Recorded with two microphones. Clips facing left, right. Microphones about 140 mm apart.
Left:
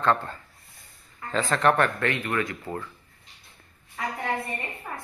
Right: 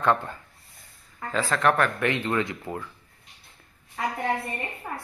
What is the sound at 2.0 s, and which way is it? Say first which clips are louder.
Speech: right 2 dB; 20° right (ahead or behind).